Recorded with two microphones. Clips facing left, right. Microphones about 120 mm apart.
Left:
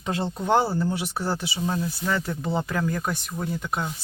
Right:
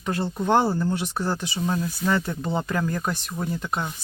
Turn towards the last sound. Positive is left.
turn(degrees=5)  # may be behind; listen again after turning